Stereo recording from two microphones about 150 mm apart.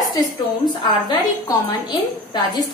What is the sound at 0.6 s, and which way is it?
A woman's voice, 30° left (ahead or behind).